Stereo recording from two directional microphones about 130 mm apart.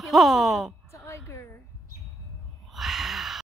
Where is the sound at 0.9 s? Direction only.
20° left (ahead or behind).